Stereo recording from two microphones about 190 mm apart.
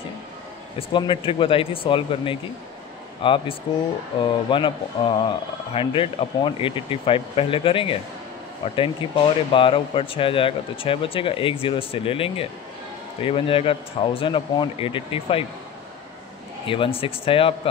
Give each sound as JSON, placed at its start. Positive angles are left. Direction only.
{"t": 0.7, "sound": "speech", "side_deg": 25}
{"t": 16.6, "sound": "speech", "side_deg": 25}